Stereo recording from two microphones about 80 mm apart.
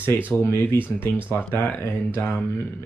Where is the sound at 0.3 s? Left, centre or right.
Left.